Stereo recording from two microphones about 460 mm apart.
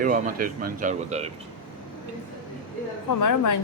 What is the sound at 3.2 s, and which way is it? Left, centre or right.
Speech, left.